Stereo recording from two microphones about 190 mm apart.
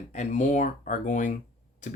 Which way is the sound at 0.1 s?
40° left (ahead or behind).